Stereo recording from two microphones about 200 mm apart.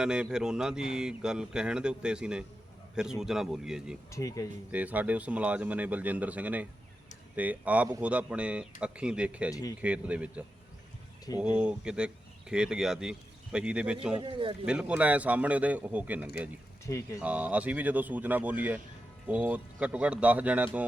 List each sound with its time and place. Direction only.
0.0 s speech: 5° right (ahead or behind)
4.1 s speech: 15° left (ahead or behind)
4.7 s speech: 5° right (ahead or behind)
9.5 s speech: 15° left (ahead or behind)
9.8 s speech: 5° right (ahead or behind)
14.2 s speech: 25° right (ahead or behind)
14.6 s speech: 5° right (ahead or behind)